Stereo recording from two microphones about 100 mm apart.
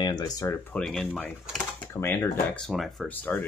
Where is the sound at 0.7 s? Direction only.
5° left (ahead or behind).